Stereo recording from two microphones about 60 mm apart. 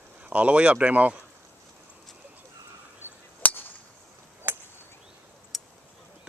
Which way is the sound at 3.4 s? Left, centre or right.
Left.